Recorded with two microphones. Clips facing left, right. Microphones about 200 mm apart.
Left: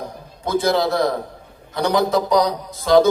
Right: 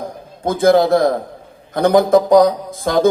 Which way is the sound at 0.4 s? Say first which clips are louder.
Right 6 dB; 50° right (ahead or behind).